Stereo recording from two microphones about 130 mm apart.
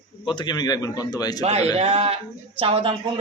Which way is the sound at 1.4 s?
50° right (ahead or behind).